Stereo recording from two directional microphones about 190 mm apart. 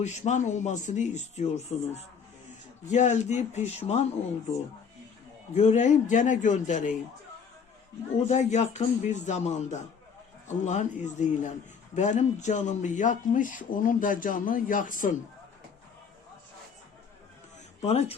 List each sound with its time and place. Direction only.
0.0 s speech: 35° left (ahead or behind)
5.5 s speech: 35° left (ahead or behind)
8.3 s speech: 35° left (ahead or behind)
17.8 s speech: 35° left (ahead or behind)